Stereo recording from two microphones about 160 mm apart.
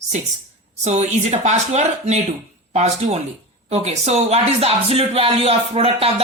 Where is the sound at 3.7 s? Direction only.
40° right (ahead or behind).